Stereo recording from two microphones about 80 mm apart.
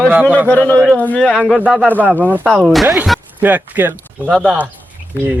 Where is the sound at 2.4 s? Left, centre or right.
Centre.